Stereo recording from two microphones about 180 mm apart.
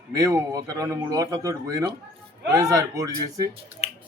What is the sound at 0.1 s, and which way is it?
Speech, 20° right (ahead or behind).